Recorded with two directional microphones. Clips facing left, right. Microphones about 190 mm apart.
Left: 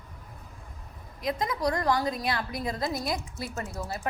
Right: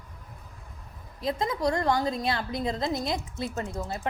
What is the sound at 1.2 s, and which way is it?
A woman's voice, 30° right (ahead or behind).